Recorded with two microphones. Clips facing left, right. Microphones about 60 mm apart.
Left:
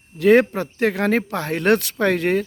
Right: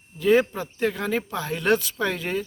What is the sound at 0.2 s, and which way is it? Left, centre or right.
Speech, left.